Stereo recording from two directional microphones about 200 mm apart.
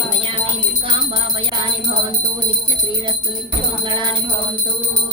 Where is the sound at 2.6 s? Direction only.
25° right (ahead or behind).